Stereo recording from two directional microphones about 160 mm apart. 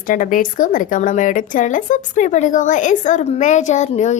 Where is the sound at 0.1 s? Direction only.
55° left (ahead or behind).